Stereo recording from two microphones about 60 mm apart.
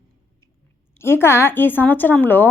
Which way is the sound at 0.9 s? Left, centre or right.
Left.